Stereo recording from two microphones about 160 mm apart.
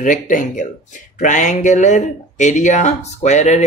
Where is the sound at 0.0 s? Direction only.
55° left (ahead or behind).